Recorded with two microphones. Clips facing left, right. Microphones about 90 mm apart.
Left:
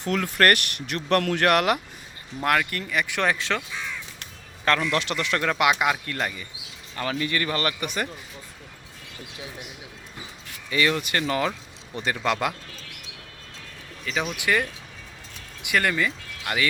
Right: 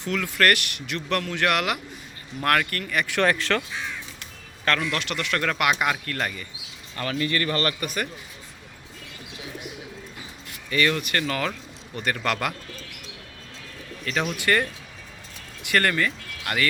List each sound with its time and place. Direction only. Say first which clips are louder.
0.0 s speech: left 1 dB; 40° left (ahead or behind)
2.4 s speech: even; 10° left (ahead or behind)
4.8 s speech: left 2 dB; 30° left (ahead or behind)
5.4 s speech: left 2 dB; 20° left (ahead or behind)
10.7 s speech: even; 15° left (ahead or behind)
14.0 s speech: right 1 dB; 10° left (ahead or behind)
15.7 s speech: right 1 dB; 5° left (ahead or behind)